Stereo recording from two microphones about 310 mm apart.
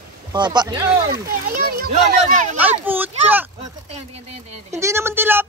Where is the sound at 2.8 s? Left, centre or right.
Centre.